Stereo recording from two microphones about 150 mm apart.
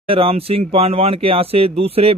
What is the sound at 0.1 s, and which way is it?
Speech, 40° right (ahead or behind).